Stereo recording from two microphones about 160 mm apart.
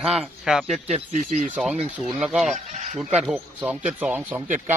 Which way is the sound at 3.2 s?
10° right (ahead or behind).